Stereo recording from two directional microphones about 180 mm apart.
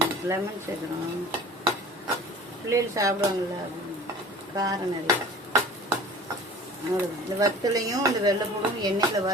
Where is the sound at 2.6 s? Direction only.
15° right (ahead or behind).